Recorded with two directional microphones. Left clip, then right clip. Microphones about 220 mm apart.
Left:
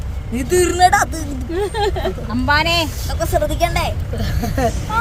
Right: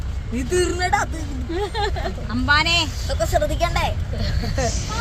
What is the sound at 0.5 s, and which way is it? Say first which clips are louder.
Speech: left 8 dB; 50° left (ahead or behind).